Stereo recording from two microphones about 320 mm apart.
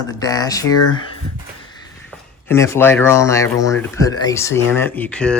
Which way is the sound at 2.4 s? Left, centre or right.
Centre.